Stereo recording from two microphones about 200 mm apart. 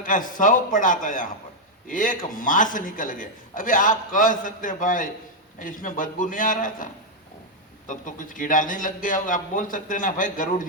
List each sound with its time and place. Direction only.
0.0 s a man's voice: 40° left (ahead or behind)
7.9 s a man's voice: 40° left (ahead or behind)